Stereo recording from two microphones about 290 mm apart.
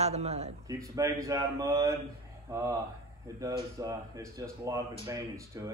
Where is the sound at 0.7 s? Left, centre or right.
Centre.